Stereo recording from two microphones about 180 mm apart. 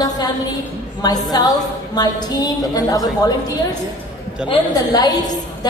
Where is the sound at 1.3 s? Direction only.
20° left (ahead or behind).